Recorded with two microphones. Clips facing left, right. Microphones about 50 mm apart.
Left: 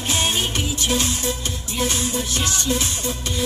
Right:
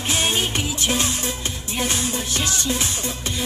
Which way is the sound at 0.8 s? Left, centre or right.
Right.